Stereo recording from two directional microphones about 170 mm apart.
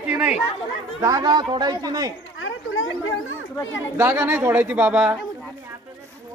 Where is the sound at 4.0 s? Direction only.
15° right (ahead or behind).